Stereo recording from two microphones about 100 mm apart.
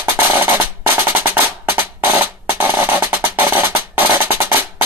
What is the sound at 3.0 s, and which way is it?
Music, 25° right (ahead or behind).